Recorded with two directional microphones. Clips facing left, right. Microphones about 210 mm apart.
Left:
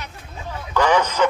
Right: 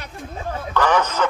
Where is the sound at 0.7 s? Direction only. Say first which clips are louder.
Left 1 dB; 10° left (ahead or behind).